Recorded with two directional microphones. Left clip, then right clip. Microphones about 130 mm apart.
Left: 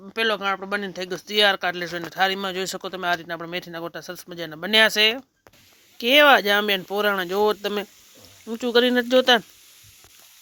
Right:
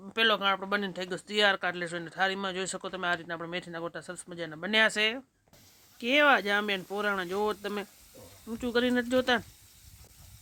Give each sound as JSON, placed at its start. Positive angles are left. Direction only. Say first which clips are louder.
{"t": 0.1, "sound": "speech", "louder": "left 3 dB", "side_deg": 5}
{"t": 1.0, "sound": "speech", "louder": "left 8 dB", "side_deg": 20}